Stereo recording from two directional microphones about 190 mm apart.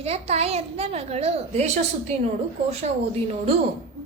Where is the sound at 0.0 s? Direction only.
35° right (ahead or behind).